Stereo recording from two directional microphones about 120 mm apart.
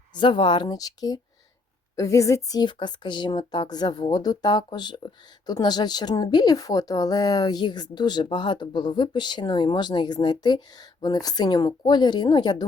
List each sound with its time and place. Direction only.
0.1 s a woman's voice: 40° left (ahead or behind)